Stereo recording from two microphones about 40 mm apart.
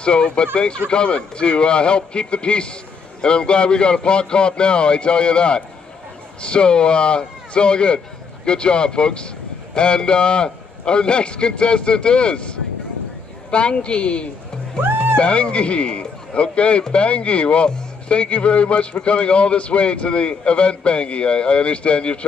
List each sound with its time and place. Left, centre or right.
0.0 s a man's voice: left
14.8 s music: right
15.1 s a man's voice: left